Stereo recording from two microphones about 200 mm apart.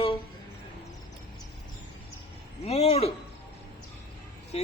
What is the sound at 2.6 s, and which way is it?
Speech, 30° left (ahead or behind).